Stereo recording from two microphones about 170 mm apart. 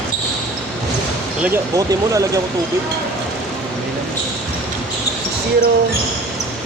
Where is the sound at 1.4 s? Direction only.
15° right (ahead or behind).